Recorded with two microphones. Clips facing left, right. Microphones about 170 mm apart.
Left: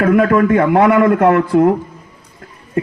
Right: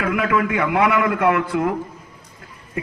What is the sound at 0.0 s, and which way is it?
A man's voice, 45° left (ahead or behind).